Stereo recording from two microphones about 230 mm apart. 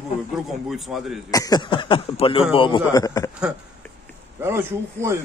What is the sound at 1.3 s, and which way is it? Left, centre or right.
Speech, centre.